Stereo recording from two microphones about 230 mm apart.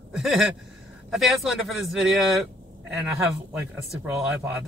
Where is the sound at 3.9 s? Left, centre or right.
Centre.